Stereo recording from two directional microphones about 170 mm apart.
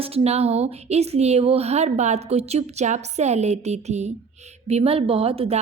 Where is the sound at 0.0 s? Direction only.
35° right (ahead or behind).